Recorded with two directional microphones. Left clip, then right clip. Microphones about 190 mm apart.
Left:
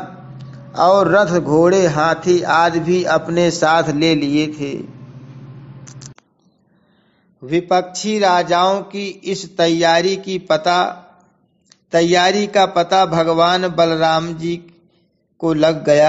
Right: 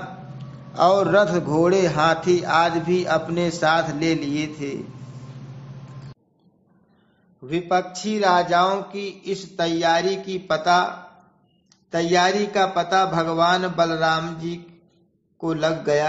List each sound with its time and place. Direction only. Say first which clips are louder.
0.4 s a man's voice: left 3 dB; 25° left (ahead or behind)
7.4 s speech: left 6 dB; 25° left (ahead or behind)
11.9 s speech: left 6 dB; 35° left (ahead or behind)